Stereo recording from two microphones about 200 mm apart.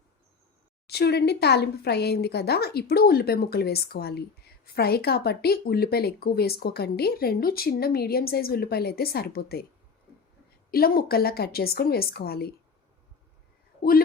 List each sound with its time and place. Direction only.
0.9 s speech: 55° left (ahead or behind)
10.7 s speech: 45° left (ahead or behind)